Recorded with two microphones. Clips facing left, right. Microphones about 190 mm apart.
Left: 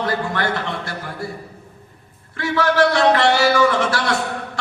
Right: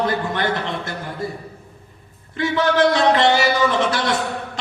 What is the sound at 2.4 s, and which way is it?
A man's voice, 20° right (ahead or behind).